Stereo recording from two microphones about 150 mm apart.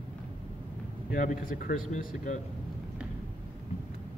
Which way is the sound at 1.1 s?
60° left (ahead or behind).